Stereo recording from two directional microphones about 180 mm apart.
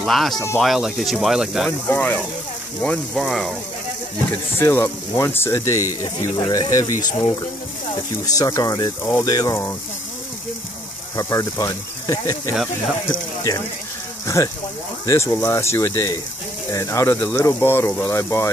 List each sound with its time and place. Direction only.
0.0 s speech: centre (ahead or behind)
1.9 s speech: 10° left (ahead or behind)
4.6 s speech: 15° left (ahead or behind)
8.4 s speech: 20° left (ahead or behind)
11.1 s speech: 20° left (ahead or behind)